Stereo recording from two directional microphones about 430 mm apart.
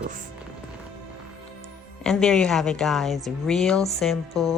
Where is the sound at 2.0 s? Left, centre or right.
Centre.